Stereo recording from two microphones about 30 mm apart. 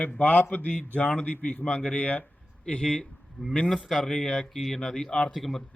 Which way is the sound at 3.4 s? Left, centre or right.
Centre.